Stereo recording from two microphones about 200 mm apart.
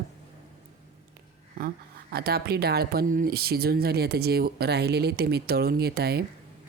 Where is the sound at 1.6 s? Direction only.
50° right (ahead or behind).